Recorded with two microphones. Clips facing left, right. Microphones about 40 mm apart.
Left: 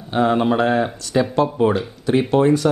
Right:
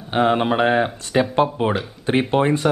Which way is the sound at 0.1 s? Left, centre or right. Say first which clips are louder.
Left 1 dB; right.